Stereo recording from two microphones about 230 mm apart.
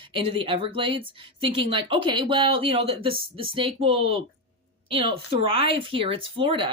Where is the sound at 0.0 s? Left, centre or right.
Right.